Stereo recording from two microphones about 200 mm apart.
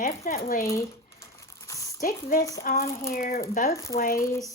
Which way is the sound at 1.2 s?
15° left (ahead or behind).